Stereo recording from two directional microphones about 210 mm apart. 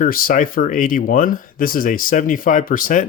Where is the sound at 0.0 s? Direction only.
40° left (ahead or behind).